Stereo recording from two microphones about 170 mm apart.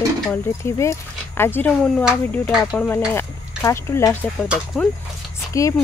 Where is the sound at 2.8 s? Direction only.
10° left (ahead or behind).